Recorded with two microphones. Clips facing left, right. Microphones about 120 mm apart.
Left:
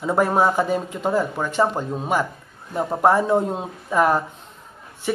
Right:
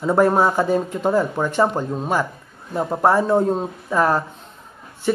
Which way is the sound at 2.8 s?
Centre (ahead or behind).